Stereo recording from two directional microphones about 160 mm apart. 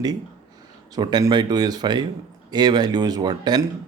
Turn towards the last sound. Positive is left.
turn(degrees=-25)  # may be behind; listen again after turning